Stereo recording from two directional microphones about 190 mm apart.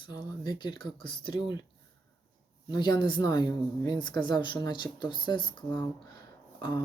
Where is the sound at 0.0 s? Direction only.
25° left (ahead or behind).